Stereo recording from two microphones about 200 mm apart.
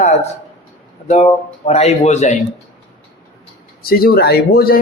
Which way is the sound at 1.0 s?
35° left (ahead or behind).